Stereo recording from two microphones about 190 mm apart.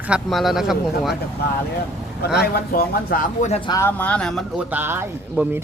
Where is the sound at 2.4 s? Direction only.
55° left (ahead or behind); by 3.6 s 35° left (ahead or behind).